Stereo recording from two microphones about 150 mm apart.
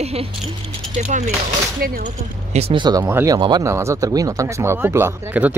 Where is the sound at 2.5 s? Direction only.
40° right (ahead or behind).